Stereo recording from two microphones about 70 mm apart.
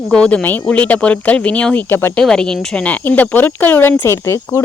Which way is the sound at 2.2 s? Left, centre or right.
Centre.